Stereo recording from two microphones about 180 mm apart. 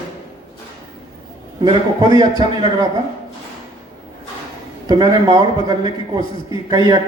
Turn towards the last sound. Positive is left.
turn(degrees=-25)  # may be behind; listen again after turning